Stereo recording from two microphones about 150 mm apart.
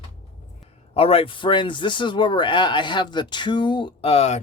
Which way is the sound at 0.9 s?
40° left (ahead or behind).